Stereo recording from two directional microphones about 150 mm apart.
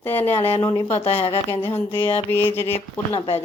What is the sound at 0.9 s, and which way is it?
Speech, 45° left (ahead or behind).